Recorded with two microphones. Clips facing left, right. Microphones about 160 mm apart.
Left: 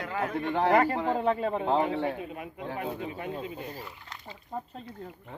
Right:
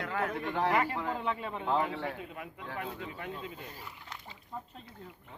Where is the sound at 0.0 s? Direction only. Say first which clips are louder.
Left 2 dB; 10° left (ahead or behind).